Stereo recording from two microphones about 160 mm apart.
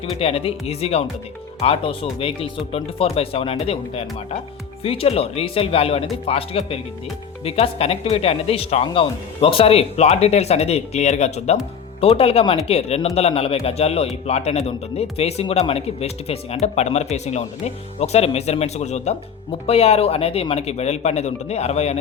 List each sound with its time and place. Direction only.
0.0 s speech: 40° left (ahead or behind)